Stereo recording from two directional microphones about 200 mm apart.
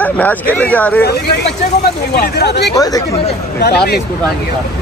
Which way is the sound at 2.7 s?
20° left (ahead or behind).